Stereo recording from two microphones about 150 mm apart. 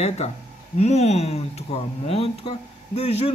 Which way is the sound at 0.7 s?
45° left (ahead or behind).